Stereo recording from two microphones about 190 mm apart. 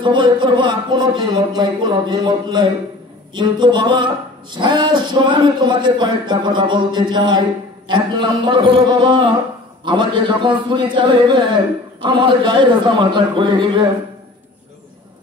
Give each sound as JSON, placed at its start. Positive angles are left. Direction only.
{"t": 0.0, "sound": "speech", "side_deg": -25}